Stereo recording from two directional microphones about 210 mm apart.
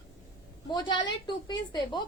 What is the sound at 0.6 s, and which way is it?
A woman's voice, 20° left (ahead or behind).